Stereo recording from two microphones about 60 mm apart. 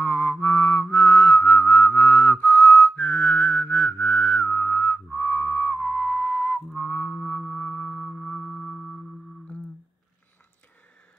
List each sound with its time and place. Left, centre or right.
0.0 s music: left; by 8.9 s centre